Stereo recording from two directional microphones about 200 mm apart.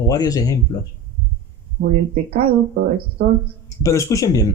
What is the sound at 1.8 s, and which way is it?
Speech, 55° right (ahead or behind).